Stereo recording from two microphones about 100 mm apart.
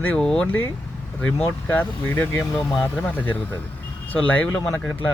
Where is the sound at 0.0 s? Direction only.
10° left (ahead or behind).